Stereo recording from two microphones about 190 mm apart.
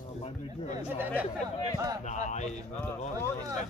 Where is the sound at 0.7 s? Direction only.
10° right (ahead or behind).